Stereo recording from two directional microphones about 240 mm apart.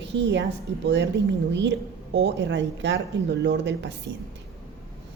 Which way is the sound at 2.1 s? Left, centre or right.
Right.